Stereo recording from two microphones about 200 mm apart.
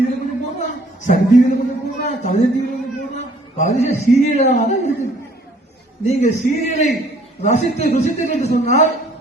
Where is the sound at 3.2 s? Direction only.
35° left (ahead or behind).